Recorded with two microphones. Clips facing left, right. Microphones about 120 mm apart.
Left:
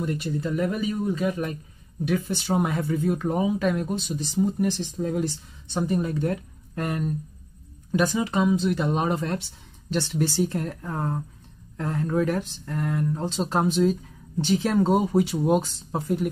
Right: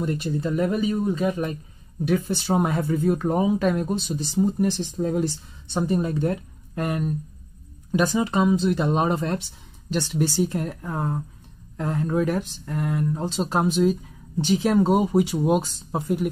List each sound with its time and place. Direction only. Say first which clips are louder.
0.0 s speech: right 2 dB; 30° right (ahead or behind)
6.8 s speech: right 2 dB; 15° right (ahead or behind)
8.2 s speech: right 2 dB; 35° right (ahead or behind)
9.8 s speech: right 1 dB; 10° right (ahead or behind)